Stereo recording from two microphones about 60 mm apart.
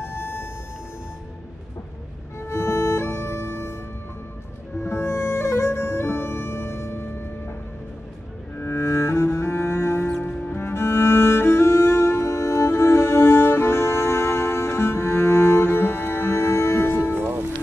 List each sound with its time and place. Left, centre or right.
0.1 s a sound: left
2.4 s music: left
4.7 s music: left
8.5 s cello: left
10.5 s music: left